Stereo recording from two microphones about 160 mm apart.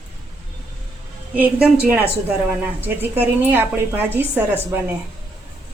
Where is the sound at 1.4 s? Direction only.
10° right (ahead or behind).